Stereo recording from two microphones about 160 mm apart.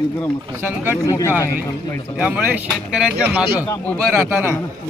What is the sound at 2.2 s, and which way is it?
Speech, 10° right (ahead or behind).